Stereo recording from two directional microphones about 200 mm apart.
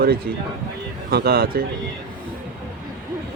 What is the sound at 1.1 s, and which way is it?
Speech, 50° right (ahead or behind).